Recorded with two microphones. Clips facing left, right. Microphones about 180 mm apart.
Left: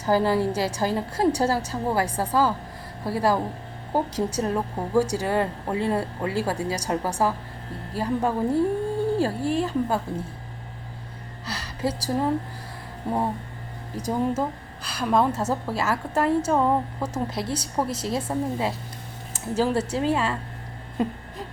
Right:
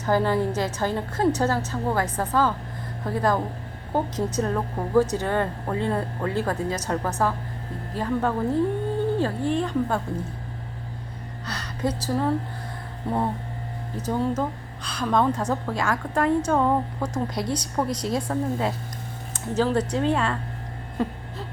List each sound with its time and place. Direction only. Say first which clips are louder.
0.0 s a woman's voice: left 1 dB; 10° left (ahead or behind)
11.4 s a woman's voice: even; 5° left (ahead or behind)
21.0 s a woman's voice: left 1 dB; 15° left (ahead or behind)